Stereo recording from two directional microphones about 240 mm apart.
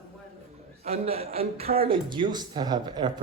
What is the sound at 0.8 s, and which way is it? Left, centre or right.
Speech, right.